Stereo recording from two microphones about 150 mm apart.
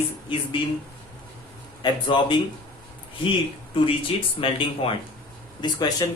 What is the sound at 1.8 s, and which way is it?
Speech, 30° left (ahead or behind).